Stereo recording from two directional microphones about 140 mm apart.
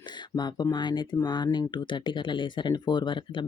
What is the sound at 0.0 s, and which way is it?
Speech, 30° left (ahead or behind).